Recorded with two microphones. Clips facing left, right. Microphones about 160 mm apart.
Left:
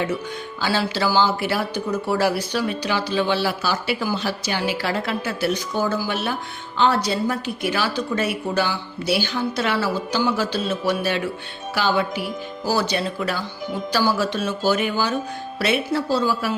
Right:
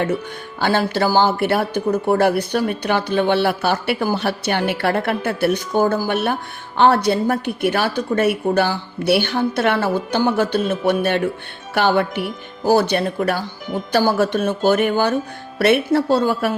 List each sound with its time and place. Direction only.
0.6 s speech: 55° right (ahead or behind)